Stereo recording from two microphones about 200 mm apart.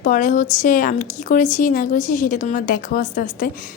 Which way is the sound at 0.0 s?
40° left (ahead or behind).